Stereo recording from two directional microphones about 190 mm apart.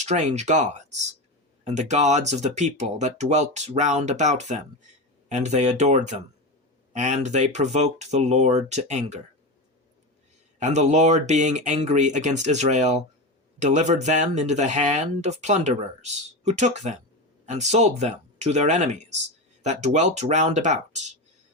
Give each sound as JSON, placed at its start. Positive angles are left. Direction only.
{"t": 0.0, "sound": "speech", "side_deg": -35}
{"t": 10.6, "sound": "speech", "side_deg": -40}